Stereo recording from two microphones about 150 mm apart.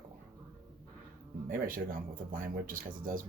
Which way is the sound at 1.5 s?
65° right (ahead or behind).